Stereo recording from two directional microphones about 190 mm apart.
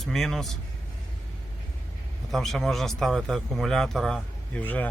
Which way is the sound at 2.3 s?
Centre (ahead or behind).